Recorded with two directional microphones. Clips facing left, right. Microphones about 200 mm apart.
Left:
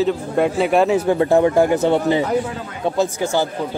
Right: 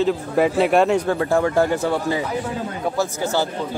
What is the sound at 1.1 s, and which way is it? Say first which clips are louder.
Speech: left 4 dB; 20° left (ahead or behind).